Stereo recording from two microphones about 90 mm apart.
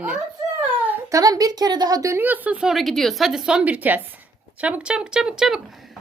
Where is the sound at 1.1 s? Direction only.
45° right (ahead or behind).